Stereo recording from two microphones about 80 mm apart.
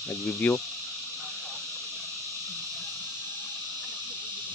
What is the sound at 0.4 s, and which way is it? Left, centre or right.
Speech, centre.